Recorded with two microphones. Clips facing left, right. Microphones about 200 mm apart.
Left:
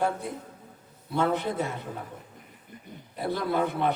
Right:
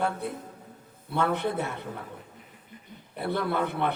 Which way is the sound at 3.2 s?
60° right (ahead or behind).